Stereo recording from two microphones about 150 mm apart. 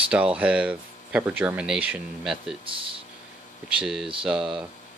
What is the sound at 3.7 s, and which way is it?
Speech, 5° right (ahead or behind).